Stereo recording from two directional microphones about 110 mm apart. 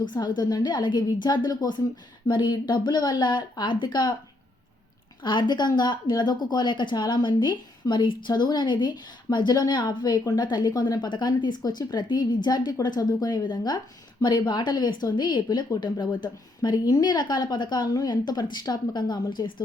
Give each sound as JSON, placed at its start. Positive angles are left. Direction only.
{"t": 0.0, "sound": "speech", "side_deg": 40}
{"t": 5.2, "sound": "speech", "side_deg": 45}